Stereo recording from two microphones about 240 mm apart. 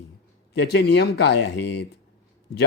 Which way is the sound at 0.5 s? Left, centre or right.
Left.